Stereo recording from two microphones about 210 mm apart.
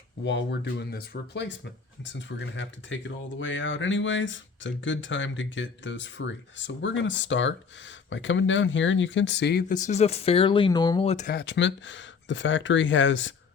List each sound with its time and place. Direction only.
0.3 s speech: 55° left (ahead or behind); by 11.3 s 30° left (ahead or behind)
11.3 s speech: 55° left (ahead or behind)